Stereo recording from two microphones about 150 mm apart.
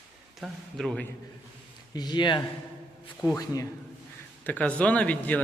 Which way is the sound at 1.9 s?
30° left (ahead or behind).